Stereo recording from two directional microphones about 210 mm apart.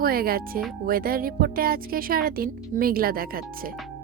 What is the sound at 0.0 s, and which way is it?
Speech, 45° right (ahead or behind).